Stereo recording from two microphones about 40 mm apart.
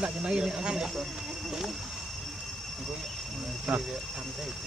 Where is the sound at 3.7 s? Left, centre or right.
Centre.